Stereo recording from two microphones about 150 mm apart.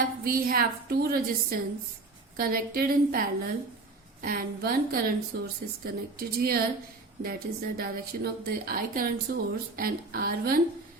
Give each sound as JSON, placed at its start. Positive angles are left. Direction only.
{"t": 0.0, "sound": "a woman's voice", "side_deg": -80}
{"t": 2.3, "sound": "a woman's voice", "side_deg": -75}